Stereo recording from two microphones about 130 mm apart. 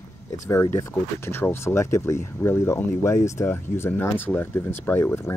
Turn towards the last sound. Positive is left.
turn(degrees=15)  # may be behind; listen again after turning